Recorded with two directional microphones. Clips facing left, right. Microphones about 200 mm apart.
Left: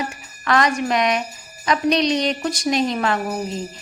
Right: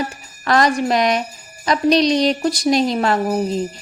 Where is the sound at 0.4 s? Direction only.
35° right (ahead or behind).